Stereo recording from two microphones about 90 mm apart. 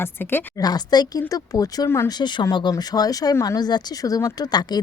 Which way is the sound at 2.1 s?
55° left (ahead or behind).